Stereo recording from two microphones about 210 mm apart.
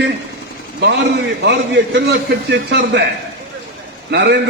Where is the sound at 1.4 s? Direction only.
55° right (ahead or behind).